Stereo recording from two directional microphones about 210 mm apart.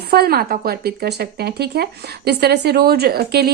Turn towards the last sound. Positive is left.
turn(degrees=-50)  # may be behind; listen again after turning